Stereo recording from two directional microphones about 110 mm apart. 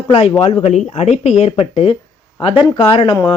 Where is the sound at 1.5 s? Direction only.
60° left (ahead or behind).